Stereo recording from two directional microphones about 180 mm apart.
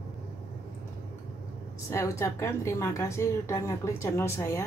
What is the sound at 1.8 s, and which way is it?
A woman's voice, 15° left (ahead or behind).